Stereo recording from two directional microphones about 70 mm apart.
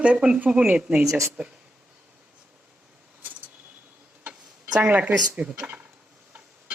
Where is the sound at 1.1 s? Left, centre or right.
Right.